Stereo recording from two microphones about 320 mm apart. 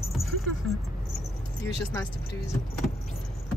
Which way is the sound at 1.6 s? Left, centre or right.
Centre.